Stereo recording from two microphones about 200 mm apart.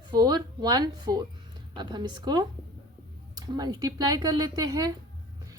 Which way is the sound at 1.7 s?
20° right (ahead or behind).